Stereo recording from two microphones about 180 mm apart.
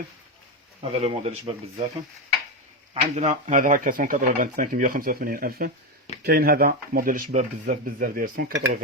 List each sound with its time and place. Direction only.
0.8 s speech: 35° right (ahead or behind)
2.9 s speech: 35° right (ahead or behind)